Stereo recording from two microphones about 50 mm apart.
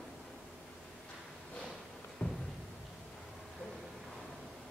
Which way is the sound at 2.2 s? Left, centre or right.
Centre.